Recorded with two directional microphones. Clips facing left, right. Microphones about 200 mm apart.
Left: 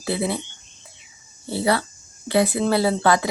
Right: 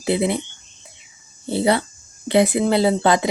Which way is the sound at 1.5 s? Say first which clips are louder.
Right 3 dB; 20° right (ahead or behind).